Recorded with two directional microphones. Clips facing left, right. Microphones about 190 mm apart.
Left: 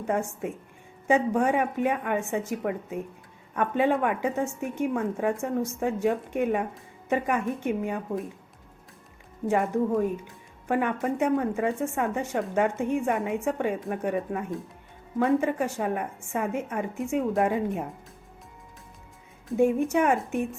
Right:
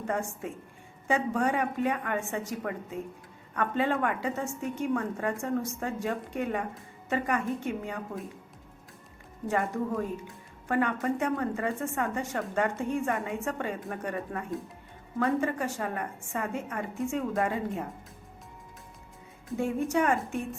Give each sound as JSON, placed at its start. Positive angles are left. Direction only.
{"t": 0.1, "sound": "a woman's voice", "side_deg": 15}
{"t": 9.5, "sound": "a woman's voice", "side_deg": 20}
{"t": 19.5, "sound": "a woman's voice", "side_deg": 15}